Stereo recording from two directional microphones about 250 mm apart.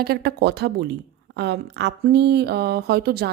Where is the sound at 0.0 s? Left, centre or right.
Right.